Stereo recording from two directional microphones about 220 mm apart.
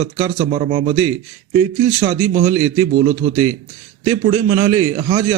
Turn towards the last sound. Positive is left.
turn(degrees=-25)  # may be behind; listen again after turning